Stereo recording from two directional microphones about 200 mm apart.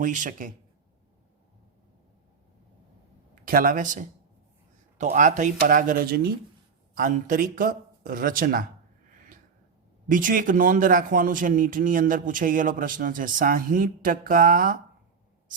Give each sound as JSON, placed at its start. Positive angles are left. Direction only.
{"t": 0.0, "sound": "speech", "side_deg": -40}
{"t": 3.4, "sound": "a man's voice", "side_deg": -45}
{"t": 10.1, "sound": "a man's voice", "side_deg": -40}